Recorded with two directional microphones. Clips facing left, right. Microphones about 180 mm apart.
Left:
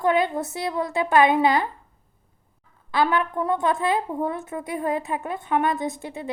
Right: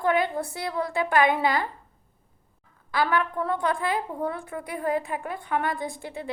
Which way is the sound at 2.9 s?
20° left (ahead or behind).